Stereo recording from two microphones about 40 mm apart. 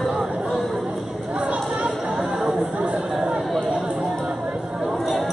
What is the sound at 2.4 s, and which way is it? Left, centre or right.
Chatter, right.